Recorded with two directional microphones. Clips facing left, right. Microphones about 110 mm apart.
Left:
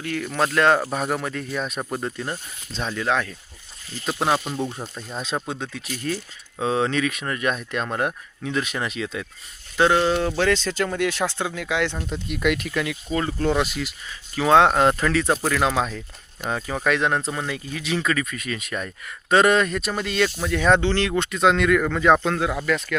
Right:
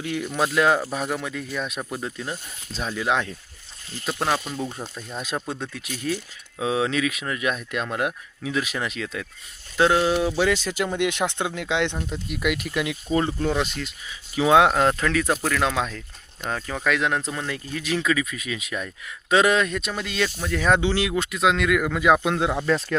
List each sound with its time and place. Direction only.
0.0 s speech: 15° right (ahead or behind)
0.3 s speech: 5° right (ahead or behind)
3.1 s speech: 20° right (ahead or behind)
4.0 s speech: 10° left (ahead or behind)
5.1 s speech: 30° left (ahead or behind)
6.6 s speech: 5° right (ahead or behind); by 11.9 s 20° right (ahead or behind)
11.9 s speech: centre (ahead or behind)
12.7 s speech: 20° right (ahead or behind)
13.4 s speech: 5° left (ahead or behind)
14.1 s speech: 10° right (ahead or behind)
14.8 s speech: 5° left (ahead or behind); by 23.0 s 30° right (ahead or behind)